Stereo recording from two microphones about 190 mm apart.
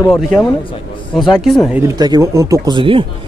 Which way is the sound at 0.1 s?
Centre (ahead or behind).